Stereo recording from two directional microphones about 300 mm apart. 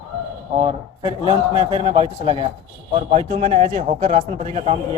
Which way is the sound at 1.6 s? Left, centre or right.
Centre.